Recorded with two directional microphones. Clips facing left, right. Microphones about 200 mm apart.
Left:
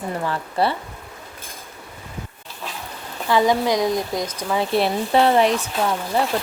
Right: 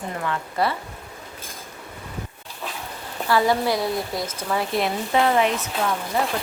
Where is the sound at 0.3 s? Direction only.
30° left (ahead or behind).